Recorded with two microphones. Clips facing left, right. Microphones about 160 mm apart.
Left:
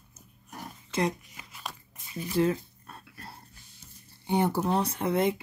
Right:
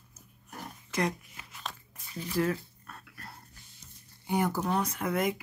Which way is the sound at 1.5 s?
10° left (ahead or behind).